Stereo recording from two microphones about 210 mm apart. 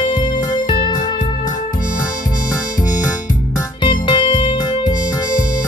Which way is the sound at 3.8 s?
25° left (ahead or behind).